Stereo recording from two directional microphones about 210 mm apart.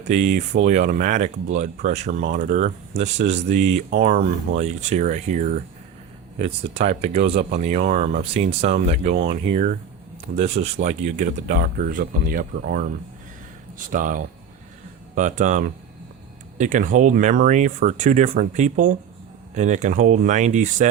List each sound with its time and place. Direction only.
0.6 s speech: 35° right (ahead or behind)